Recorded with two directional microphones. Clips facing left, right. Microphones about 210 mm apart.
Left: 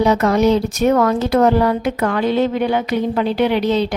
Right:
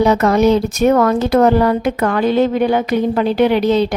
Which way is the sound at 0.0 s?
50° right (ahead or behind).